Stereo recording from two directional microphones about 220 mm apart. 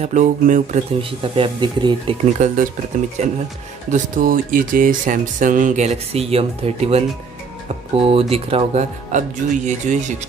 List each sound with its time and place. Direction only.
0.0 s speech: 35° right (ahead or behind)
1.3 s speech: 20° right (ahead or behind)
2.3 s speech: 35° right (ahead or behind)